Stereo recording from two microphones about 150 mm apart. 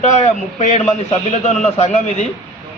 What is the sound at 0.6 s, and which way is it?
A man's voice, 50° left (ahead or behind).